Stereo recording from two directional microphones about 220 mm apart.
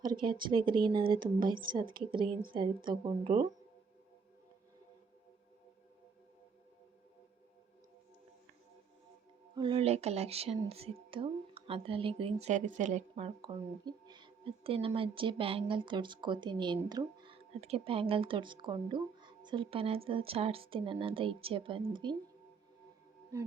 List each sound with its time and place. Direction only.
0.0 s speech: 20° right (ahead or behind)
9.6 s speech: 25° right (ahead or behind)